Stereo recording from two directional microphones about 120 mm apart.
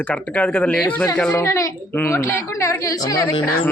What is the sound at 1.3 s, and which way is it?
A woman's voice, 25° left (ahead or behind).